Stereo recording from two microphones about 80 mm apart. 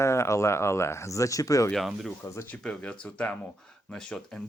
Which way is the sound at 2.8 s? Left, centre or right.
Centre.